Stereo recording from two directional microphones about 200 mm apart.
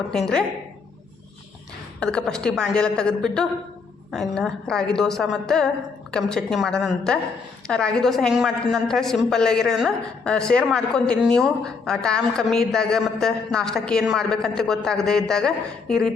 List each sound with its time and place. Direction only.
0.1 s a woman's voice: 5° left (ahead or behind)
2.0 s a woman's voice: 5° left (ahead or behind)